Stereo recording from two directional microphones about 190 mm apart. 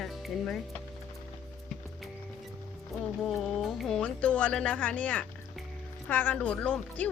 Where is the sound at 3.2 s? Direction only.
Centre (ahead or behind).